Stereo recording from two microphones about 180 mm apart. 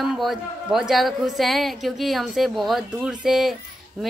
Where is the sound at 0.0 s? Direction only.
Centre (ahead or behind).